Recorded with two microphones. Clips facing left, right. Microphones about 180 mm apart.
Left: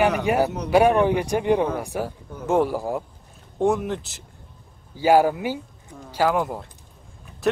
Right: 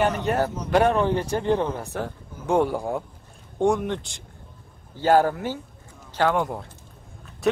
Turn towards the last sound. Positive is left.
turn(degrees=0)  # may be behind; listen again after turning